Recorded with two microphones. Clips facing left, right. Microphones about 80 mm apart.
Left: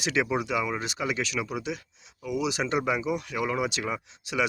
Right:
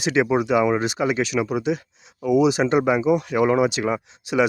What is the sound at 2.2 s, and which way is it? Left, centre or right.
Speech, right.